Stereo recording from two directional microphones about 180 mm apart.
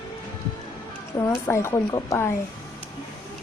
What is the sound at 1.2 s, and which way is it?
Speech, 15° left (ahead or behind).